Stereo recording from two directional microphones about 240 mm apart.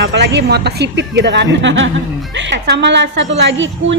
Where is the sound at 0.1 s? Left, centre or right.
Right.